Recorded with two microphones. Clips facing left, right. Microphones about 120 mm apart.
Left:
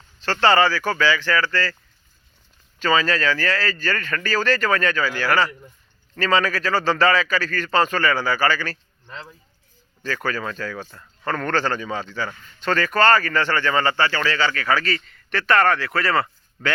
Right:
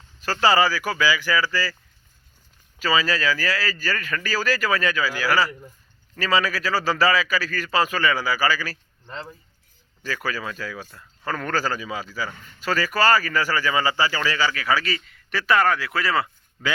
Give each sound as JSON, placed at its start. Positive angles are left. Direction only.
{"t": 0.2, "sound": "a man's voice", "side_deg": -10}
{"t": 2.7, "sound": "speech", "side_deg": -5}
{"t": 9.0, "sound": "speech", "side_deg": -35}
{"t": 10.0, "sound": "a man's voice", "side_deg": -5}